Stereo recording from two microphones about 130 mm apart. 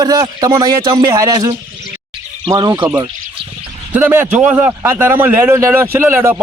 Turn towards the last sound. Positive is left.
turn(degrees=-20)  # may be behind; listen again after turning